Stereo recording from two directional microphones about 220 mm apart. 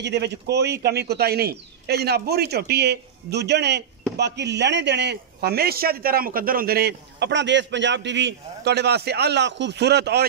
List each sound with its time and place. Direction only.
0.0 s a man's voice: 50° right (ahead or behind)